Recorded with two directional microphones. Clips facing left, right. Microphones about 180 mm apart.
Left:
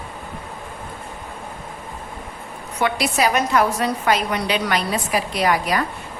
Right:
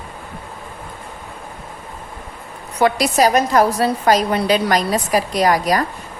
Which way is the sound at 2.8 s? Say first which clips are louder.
Right 5 dB; 40° right (ahead or behind).